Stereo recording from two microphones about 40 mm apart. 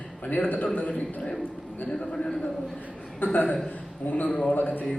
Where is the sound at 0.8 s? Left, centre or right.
Left.